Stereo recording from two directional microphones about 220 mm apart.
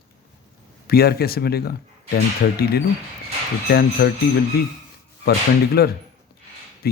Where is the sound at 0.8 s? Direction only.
45° left (ahead or behind).